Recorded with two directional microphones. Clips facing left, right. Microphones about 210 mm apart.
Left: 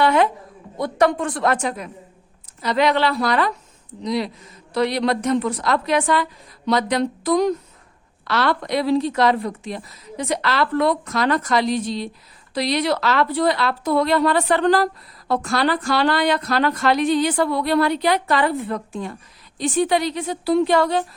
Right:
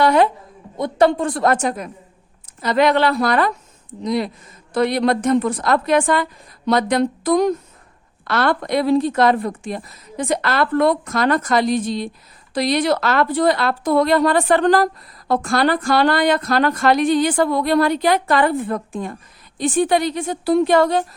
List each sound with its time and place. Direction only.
0.0 s a woman's voice: 40° right (ahead or behind)
0.8 s a woman's voice: 30° right (ahead or behind); by 21.0 s 50° right (ahead or behind)